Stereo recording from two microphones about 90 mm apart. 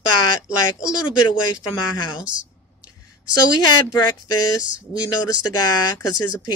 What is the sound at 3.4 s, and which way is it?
Speech, 50° left (ahead or behind).